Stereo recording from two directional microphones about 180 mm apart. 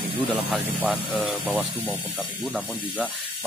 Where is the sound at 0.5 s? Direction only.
5° right (ahead or behind).